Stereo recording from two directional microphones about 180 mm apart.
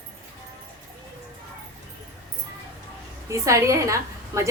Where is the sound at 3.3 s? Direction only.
15° right (ahead or behind).